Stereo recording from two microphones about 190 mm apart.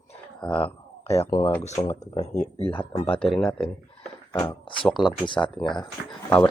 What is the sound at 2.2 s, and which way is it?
Speech, 35° left (ahead or behind).